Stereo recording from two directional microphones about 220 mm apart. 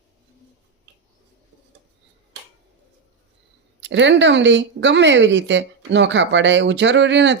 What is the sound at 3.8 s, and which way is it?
A woman's voice, 55° right (ahead or behind).